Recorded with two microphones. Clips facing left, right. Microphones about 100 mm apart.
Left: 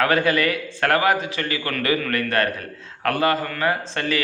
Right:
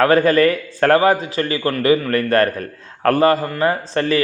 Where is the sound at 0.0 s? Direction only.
40° right (ahead or behind).